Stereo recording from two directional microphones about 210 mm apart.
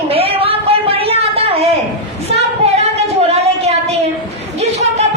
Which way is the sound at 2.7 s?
30° right (ahead or behind).